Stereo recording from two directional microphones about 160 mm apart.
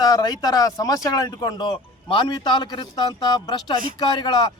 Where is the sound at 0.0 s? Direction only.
25° left (ahead or behind).